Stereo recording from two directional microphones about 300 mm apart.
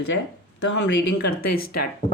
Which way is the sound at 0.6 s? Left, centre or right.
Left.